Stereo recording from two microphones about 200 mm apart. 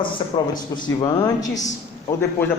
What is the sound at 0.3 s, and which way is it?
Speech, 25° left (ahead or behind).